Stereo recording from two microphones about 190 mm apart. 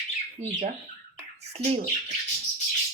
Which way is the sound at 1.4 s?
35° right (ahead or behind).